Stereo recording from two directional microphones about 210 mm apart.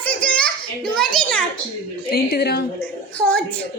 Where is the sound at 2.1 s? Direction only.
50° left (ahead or behind).